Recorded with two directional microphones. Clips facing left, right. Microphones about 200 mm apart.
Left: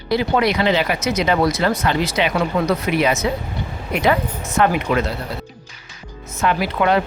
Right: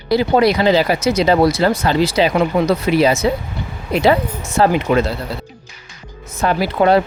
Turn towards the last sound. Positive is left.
turn(degrees=-35)  # may be behind; listen again after turning